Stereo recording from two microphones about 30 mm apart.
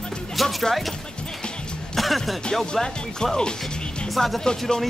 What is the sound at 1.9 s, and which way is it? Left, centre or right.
Music, centre.